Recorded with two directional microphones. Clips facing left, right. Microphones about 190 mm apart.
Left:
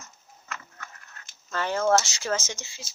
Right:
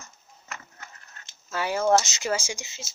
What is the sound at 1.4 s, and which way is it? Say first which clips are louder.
Speech: right 1 dB; 10° right (ahead or behind).